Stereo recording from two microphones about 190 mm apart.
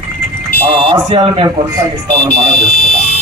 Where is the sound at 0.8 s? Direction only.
25° right (ahead or behind).